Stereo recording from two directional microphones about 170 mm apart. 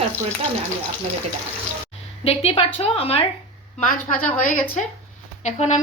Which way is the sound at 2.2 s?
35° left (ahead or behind).